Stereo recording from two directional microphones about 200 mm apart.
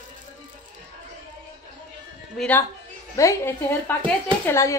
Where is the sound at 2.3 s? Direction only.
5° left (ahead or behind).